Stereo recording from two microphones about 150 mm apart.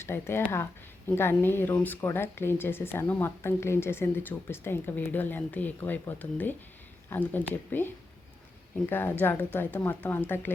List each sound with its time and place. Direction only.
0.0 s speech: 15° left (ahead or behind)
8.9 s speech: 15° left (ahead or behind)